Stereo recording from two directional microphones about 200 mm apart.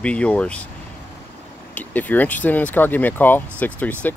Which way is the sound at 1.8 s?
10° left (ahead or behind).